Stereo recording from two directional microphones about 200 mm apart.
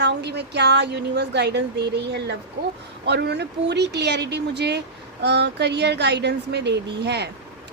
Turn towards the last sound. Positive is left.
turn(degrees=-55)  # may be behind; listen again after turning